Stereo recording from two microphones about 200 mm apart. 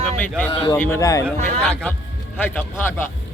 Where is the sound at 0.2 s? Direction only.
10° left (ahead or behind).